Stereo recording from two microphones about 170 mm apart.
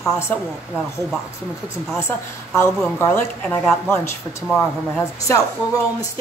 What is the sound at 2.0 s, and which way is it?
Speech, 15° left (ahead or behind).